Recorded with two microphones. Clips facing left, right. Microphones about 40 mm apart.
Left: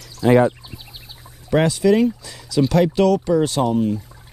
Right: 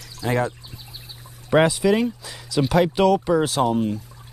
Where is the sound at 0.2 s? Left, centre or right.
Centre.